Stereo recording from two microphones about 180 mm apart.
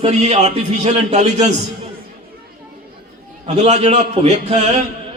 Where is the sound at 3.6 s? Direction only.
40° right (ahead or behind).